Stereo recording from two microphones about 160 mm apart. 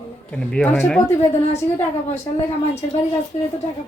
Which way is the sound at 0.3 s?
5° left (ahead or behind).